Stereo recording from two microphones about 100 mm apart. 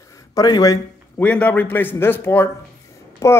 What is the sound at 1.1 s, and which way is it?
A man's voice, 15° left (ahead or behind).